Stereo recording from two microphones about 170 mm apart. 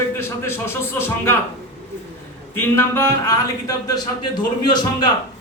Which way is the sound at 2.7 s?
15° left (ahead or behind).